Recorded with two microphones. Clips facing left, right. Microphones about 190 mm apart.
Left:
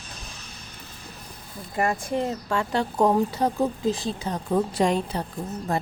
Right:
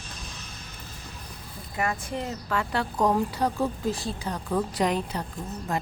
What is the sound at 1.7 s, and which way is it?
Speech, 35° left (ahead or behind).